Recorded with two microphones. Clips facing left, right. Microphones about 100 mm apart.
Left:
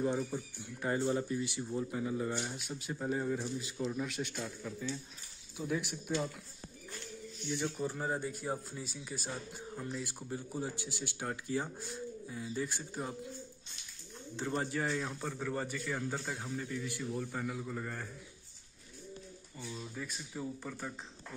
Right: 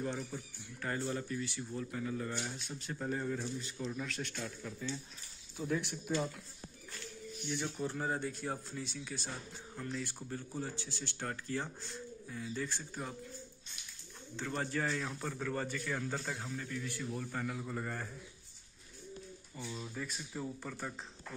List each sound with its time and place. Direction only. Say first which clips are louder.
0.3 s speech: left 5 dB; 20° left (ahead or behind); by 6.1 s 5° left (ahead or behind)
7.7 s speech: left 1 dB; 5° left (ahead or behind)
14.3 s speech: left 2 dB; 20° left (ahead or behind)
15.0 s speech: left 1 dB; 10° left (ahead or behind)
19.6 s speech: even; 5° right (ahead or behind)